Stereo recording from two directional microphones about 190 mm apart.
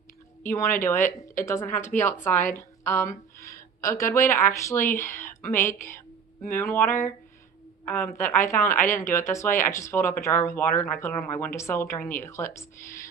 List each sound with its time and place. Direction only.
0.4 s a woman's voice: 15° left (ahead or behind)